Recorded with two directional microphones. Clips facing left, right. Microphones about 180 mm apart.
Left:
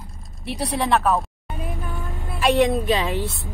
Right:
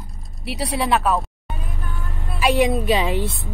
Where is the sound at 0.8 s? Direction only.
Centre (ahead or behind).